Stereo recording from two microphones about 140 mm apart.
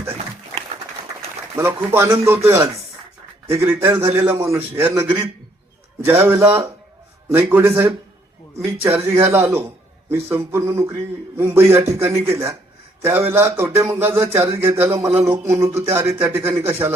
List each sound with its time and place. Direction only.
1.5 s speech: 15° right (ahead or behind)